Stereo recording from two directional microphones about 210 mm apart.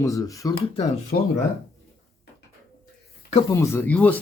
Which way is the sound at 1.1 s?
45° left (ahead or behind).